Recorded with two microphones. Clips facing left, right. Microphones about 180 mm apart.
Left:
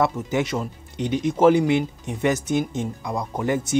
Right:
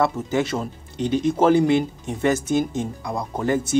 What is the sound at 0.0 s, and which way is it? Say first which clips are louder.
Speech: right 1 dB; 15° left (ahead or behind).